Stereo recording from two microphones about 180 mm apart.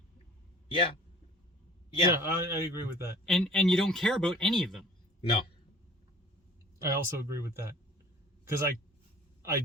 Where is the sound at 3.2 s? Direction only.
Centre (ahead or behind).